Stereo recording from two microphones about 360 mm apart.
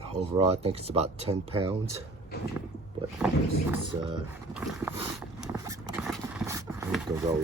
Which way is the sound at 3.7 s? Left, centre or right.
Centre.